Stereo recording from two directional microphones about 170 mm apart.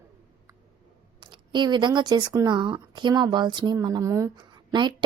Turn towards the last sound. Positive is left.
turn(degrees=-25)  # may be behind; listen again after turning